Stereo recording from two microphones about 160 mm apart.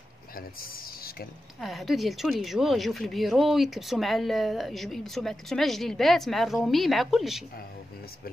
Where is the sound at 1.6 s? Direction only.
Centre (ahead or behind).